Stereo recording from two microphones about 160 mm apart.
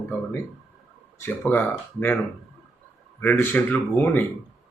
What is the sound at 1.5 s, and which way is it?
Speech, 10° left (ahead or behind).